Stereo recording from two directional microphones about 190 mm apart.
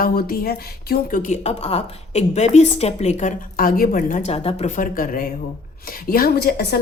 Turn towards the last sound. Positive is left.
turn(degrees=55)  # may be behind; listen again after turning